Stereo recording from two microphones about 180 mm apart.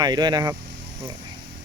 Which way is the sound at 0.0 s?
25° right (ahead or behind).